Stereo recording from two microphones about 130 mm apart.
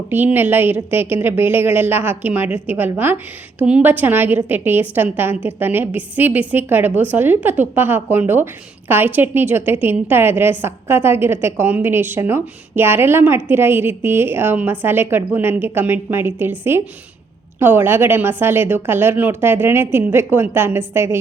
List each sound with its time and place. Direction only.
0.1 s a woman's voice: 15° right (ahead or behind)